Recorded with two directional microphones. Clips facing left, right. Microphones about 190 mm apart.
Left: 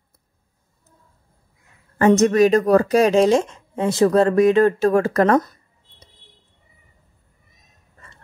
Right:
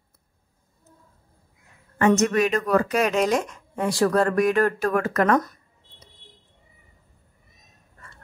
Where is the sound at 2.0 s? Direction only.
35° left (ahead or behind).